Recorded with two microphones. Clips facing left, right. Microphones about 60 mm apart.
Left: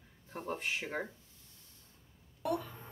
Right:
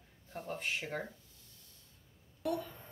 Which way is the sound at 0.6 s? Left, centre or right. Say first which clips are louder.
Right 3 dB; centre.